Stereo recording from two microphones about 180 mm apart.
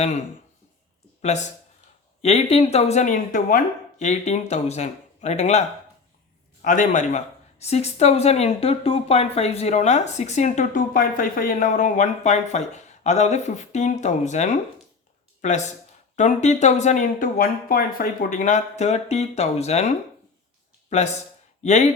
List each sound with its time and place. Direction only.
1.2 s a man's voice: 40° left (ahead or behind)
20.9 s speech: 40° left (ahead or behind)